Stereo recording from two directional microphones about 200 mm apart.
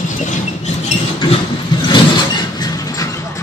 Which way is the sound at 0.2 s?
35° left (ahead or behind).